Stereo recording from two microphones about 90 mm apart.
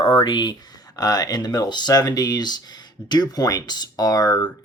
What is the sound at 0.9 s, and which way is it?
Speech, 45° left (ahead or behind).